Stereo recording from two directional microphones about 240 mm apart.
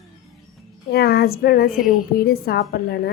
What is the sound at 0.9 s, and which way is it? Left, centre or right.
Speech, left.